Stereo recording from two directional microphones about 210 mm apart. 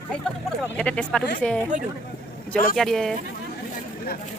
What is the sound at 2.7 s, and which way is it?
Speech, centre (ahead or behind).